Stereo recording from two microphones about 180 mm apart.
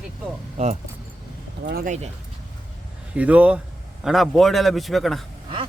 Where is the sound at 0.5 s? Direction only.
40° right (ahead or behind).